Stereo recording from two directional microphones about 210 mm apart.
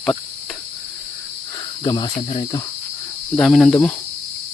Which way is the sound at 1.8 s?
20° left (ahead or behind).